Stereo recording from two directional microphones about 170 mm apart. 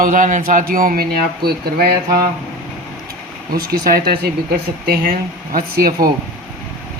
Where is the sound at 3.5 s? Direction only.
60° right (ahead or behind).